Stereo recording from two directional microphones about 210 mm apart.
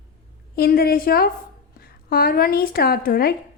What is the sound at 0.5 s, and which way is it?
A woman's voice, 50° left (ahead or behind).